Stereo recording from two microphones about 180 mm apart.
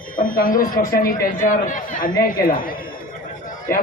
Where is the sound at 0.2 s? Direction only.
50° left (ahead or behind).